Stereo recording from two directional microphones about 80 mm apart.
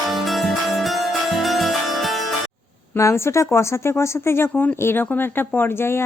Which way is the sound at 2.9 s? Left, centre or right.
Left.